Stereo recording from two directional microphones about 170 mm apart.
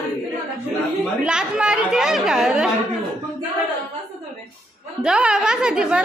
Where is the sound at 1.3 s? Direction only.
5° right (ahead or behind).